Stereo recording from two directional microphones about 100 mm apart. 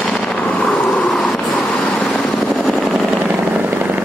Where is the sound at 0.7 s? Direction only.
5° left (ahead or behind).